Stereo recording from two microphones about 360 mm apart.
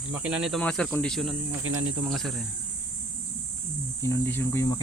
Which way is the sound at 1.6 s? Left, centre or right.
Right.